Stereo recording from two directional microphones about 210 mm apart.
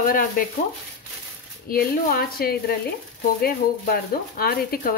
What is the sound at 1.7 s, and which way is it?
Speech, 45° left (ahead or behind).